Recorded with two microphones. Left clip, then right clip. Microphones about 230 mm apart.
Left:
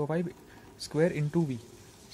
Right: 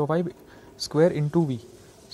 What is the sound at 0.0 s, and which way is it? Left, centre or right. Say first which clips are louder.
Speech: right 7 dB; centre.